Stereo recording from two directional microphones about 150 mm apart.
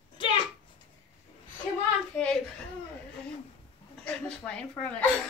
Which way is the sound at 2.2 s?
5° left (ahead or behind).